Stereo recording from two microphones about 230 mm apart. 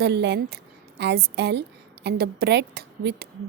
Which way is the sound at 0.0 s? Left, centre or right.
Right.